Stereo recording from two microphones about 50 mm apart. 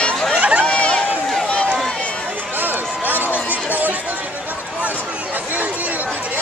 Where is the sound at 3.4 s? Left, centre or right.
Right.